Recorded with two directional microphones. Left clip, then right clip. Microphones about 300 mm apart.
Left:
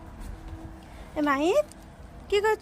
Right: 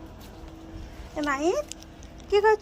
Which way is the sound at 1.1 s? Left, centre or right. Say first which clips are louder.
Left 2 dB; centre.